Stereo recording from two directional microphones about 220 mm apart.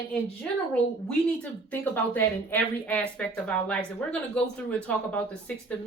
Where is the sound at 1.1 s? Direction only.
5° left (ahead or behind).